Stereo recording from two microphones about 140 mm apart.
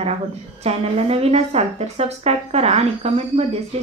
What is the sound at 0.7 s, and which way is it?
A woman's voice, 45° right (ahead or behind).